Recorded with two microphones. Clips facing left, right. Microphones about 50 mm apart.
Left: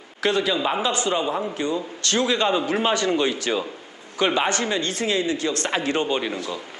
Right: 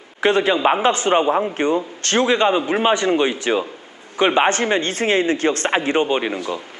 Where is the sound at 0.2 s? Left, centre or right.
Right.